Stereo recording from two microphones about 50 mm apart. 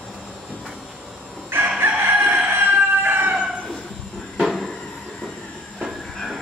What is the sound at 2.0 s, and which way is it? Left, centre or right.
Chicken, right.